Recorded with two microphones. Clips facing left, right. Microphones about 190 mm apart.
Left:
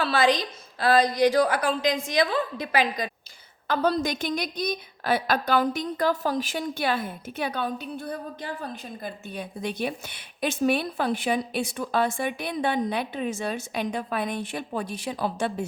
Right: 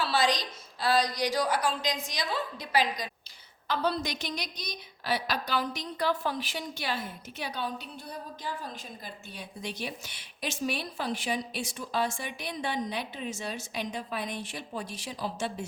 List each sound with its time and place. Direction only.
0.0 s a woman's voice: 55° left (ahead or behind)